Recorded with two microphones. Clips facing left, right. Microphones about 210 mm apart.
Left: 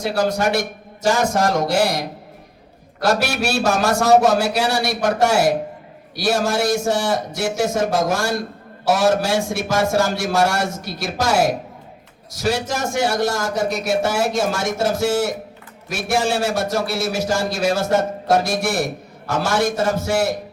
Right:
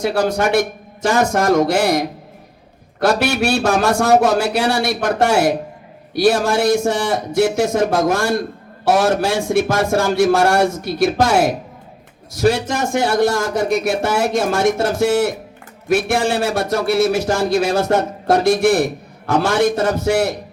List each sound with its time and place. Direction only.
0.0 s a man's voice: 55° right (ahead or behind)